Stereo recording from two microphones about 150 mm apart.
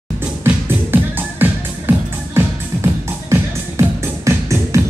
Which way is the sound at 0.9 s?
15° right (ahead or behind).